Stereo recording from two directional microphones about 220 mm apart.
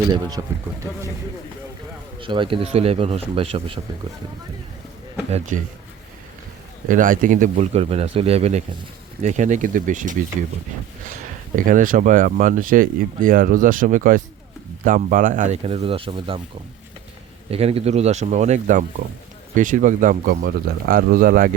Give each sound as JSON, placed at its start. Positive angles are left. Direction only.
{"t": 0.1, "sound": "speech", "side_deg": -15}
{"t": 2.2, "sound": "speech", "side_deg": -25}
{"t": 5.5, "sound": "speech", "side_deg": -35}
{"t": 6.8, "sound": "speech", "side_deg": -35}
{"t": 11.5, "sound": "speech", "side_deg": -35}
{"t": 17.5, "sound": "speech", "side_deg": -25}